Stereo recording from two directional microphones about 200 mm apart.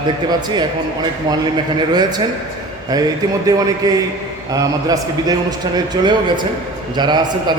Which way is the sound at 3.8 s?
20° right (ahead or behind).